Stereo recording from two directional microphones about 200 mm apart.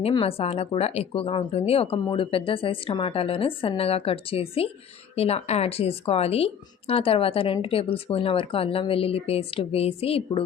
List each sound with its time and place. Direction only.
0.0 s a woman's voice: 30° left (ahead or behind)